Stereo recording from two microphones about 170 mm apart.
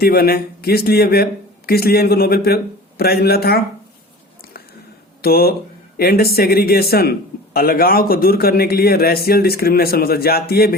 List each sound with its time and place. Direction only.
0.0 s speech: 65° left (ahead or behind)
5.2 s speech: 65° left (ahead or behind)